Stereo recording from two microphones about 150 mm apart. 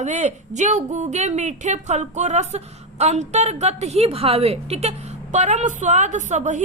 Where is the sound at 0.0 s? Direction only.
50° right (ahead or behind).